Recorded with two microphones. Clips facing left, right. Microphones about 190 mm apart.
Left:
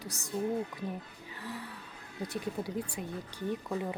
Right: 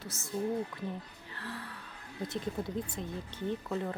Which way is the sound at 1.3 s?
15° left (ahead or behind).